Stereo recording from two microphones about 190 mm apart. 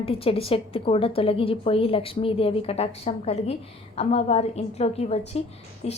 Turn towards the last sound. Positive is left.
turn(degrees=35)  # may be behind; listen again after turning